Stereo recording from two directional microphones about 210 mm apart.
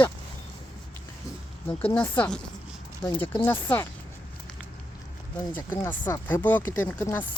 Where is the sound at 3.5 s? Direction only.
10° left (ahead or behind).